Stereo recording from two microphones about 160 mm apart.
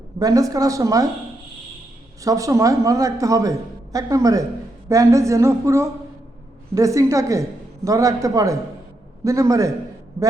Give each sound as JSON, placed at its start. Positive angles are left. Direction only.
{"t": 0.2, "sound": "a man's voice", "side_deg": -20}
{"t": 2.2, "sound": "a man's voice", "side_deg": -20}